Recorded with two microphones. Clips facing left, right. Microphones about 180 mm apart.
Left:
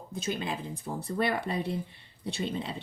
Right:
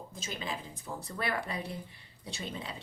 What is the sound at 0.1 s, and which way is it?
Speech, 60° left (ahead or behind).